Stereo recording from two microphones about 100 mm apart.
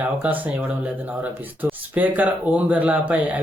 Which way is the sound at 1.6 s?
15° right (ahead or behind).